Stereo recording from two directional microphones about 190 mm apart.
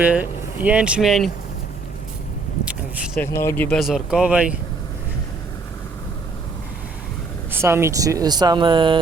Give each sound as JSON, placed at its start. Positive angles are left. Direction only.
{"t": 0.0, "sound": "speech", "side_deg": -10}
{"t": 3.2, "sound": "speech", "side_deg": 10}
{"t": 7.5, "sound": "speech", "side_deg": -15}